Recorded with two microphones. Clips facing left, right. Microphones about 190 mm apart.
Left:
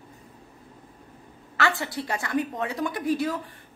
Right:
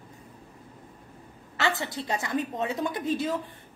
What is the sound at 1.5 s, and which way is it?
A woman's voice, 20° right (ahead or behind).